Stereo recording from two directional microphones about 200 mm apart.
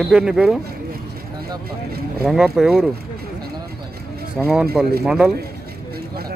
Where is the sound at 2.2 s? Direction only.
Centre (ahead or behind).